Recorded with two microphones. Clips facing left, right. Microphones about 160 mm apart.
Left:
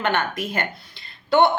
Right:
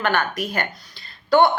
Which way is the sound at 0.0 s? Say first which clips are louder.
Right 1 dB; 25° left (ahead or behind).